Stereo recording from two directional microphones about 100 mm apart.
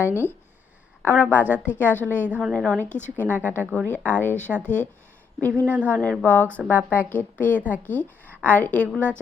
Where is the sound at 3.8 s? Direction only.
15° left (ahead or behind).